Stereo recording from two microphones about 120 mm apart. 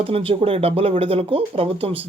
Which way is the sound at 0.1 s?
50° right (ahead or behind).